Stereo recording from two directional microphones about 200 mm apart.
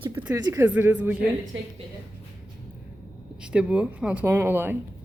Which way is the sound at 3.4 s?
5° right (ahead or behind).